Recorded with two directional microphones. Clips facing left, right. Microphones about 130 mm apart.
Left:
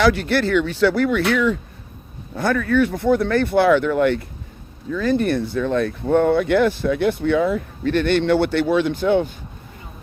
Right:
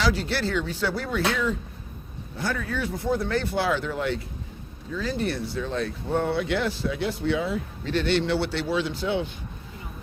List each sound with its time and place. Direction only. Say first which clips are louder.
0.0 s speech: left 8 dB; 60° left (ahead or behind)
2.3 s speech: left 11 dB; 60° left (ahead or behind)